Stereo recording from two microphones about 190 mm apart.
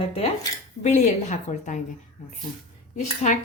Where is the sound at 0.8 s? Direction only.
40° left (ahead or behind).